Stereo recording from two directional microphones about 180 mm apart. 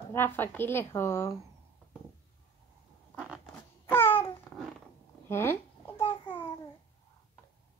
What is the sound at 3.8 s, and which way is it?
Babbling, 10° left (ahead or behind).